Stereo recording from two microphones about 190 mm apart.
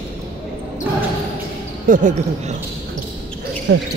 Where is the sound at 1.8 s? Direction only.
40° right (ahead or behind).